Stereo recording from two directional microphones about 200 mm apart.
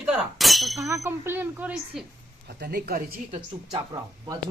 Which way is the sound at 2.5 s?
55° right (ahead or behind).